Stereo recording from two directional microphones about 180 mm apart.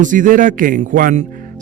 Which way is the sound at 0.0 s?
45° right (ahead or behind).